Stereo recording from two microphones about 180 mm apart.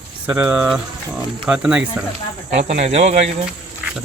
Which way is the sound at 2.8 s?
35° right (ahead or behind).